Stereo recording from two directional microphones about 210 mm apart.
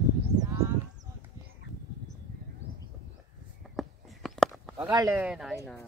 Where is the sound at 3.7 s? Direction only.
Centre (ahead or behind).